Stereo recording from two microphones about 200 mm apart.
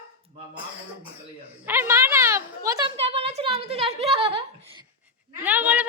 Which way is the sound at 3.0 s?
30° right (ahead or behind).